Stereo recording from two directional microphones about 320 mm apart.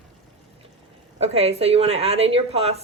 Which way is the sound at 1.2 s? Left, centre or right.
Centre.